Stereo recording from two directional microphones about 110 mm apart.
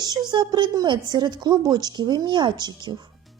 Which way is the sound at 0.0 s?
40° right (ahead or behind).